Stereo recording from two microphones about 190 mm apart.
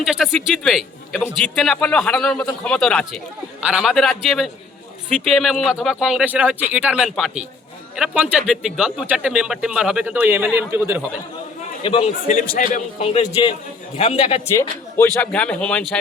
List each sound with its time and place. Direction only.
0.0 s speech: centre (ahead or behind)
11.8 s a man's voice: 30° left (ahead or behind)
14.4 s speech: 15° left (ahead or behind)